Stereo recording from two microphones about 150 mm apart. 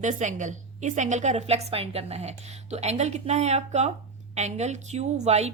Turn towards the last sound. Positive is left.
turn(degrees=-45)  # may be behind; listen again after turning